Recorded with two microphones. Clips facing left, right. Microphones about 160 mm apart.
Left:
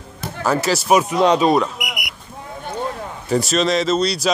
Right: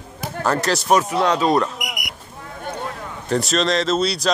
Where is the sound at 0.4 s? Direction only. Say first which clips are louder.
Left 2 dB; 5° left (ahead or behind).